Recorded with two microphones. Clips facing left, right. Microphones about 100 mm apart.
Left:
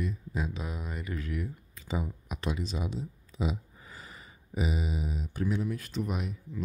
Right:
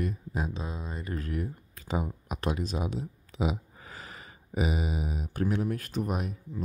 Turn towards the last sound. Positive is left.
turn(degrees=-45)  # may be behind; listen again after turning